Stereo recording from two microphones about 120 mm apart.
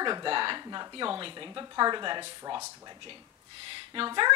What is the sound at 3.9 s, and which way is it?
Speech, 40° right (ahead or behind).